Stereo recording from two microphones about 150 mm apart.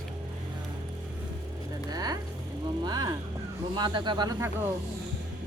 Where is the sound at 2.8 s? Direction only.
25° right (ahead or behind).